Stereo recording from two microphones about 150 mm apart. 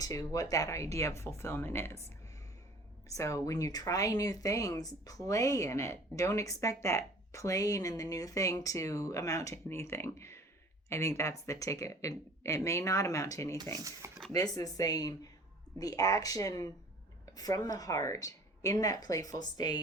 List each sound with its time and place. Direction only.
0.0 s speech: 25° left (ahead or behind)
3.1 s speech: 20° left (ahead or behind)
13.7 s speech: 20° right (ahead or behind)
14.3 s speech: 25° left (ahead or behind)